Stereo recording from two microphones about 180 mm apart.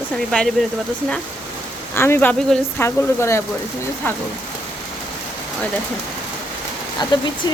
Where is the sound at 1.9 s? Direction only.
10° left (ahead or behind).